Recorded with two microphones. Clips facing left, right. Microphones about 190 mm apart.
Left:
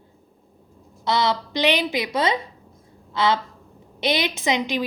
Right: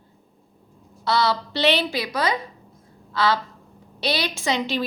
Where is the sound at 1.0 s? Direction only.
20° left (ahead or behind).